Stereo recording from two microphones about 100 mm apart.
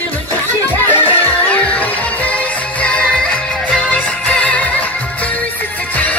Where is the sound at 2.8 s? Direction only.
10° left (ahead or behind).